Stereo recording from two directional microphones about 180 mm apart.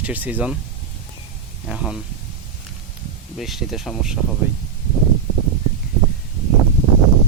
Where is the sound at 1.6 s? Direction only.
5° right (ahead or behind).